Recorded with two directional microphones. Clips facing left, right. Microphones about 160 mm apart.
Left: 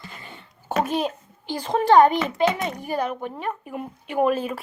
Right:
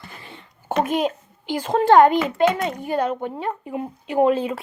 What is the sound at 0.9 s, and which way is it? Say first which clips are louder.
A child's voice: right 3 dB; 15° right (ahead or behind).